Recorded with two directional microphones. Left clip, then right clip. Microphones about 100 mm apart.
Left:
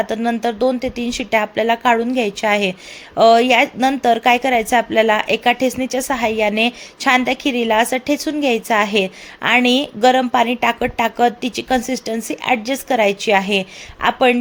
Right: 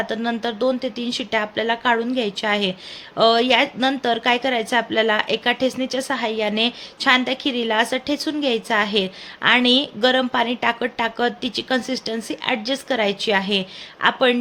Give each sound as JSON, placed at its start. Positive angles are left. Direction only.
{"t": 0.0, "sound": "speech", "side_deg": 35}